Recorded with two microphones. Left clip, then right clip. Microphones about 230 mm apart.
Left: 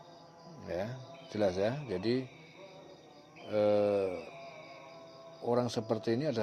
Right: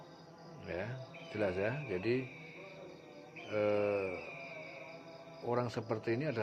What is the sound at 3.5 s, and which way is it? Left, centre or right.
Speech, left.